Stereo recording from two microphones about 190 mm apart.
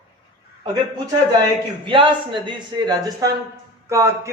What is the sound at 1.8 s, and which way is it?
Speech, 25° right (ahead or behind).